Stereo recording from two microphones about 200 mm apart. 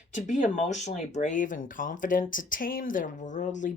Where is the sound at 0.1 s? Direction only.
35° left (ahead or behind).